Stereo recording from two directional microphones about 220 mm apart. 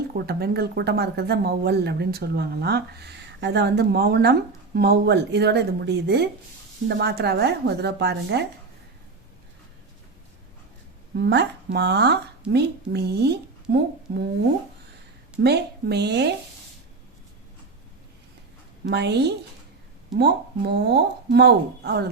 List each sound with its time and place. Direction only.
0.2 s speech: 45° right (ahead or behind)
11.2 s speech: 50° right (ahead or behind)
15.4 s speech: 50° right (ahead or behind)
18.9 s speech: 50° right (ahead or behind)